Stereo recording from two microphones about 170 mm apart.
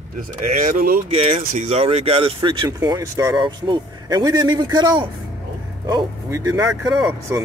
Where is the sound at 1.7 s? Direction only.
35° right (ahead or behind); by 3.4 s 20° right (ahead or behind).